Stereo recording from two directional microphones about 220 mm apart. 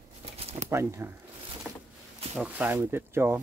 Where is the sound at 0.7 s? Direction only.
10° right (ahead or behind).